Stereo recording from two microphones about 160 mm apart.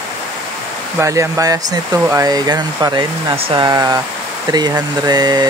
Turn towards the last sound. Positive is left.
turn(degrees=-25)  # may be behind; listen again after turning